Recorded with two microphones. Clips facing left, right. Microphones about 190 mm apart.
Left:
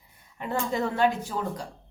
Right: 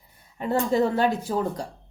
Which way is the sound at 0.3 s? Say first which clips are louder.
Right 6 dB; 35° right (ahead or behind).